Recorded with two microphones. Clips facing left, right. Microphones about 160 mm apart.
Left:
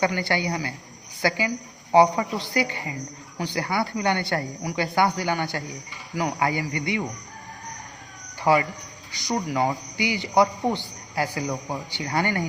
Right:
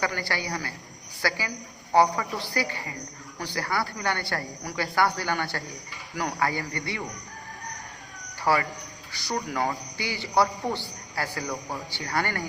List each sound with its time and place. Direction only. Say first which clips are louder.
0.0 s a man's voice: left 6 dB; 20° left (ahead or behind)
8.5 s a man's voice: left 4 dB; 15° left (ahead or behind)